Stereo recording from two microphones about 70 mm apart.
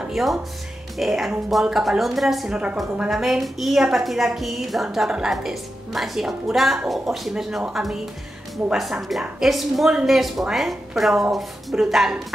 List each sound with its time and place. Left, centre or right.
0.1 s a woman's voice: centre
2.5 s a woman's voice: centre
3.1 s a woman's voice: centre
9.4 s a woman's voice: centre